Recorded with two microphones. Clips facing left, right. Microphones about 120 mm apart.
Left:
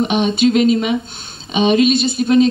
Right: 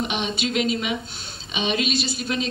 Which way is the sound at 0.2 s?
40° left (ahead or behind).